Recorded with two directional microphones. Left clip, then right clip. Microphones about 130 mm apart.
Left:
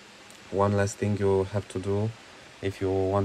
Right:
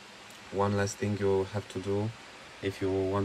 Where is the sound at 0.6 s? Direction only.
10° right (ahead or behind).